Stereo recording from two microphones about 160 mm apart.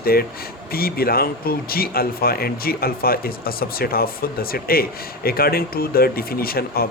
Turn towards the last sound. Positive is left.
turn(degrees=70)  # may be behind; listen again after turning